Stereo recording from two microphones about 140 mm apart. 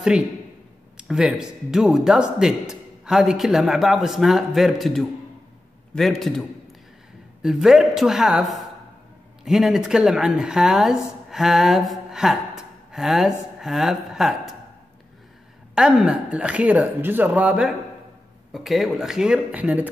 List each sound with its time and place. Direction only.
0.9 s speech: 5° right (ahead or behind)
7.4 s a woman's voice: 5° right (ahead or behind)
15.7 s speech: 5° right (ahead or behind)